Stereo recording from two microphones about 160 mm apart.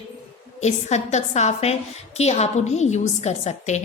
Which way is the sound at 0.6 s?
45° left (ahead or behind).